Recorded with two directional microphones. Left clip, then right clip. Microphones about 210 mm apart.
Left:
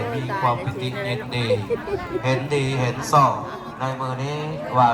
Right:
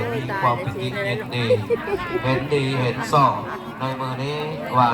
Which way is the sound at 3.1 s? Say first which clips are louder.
Left 1 dB; 40° left (ahead or behind).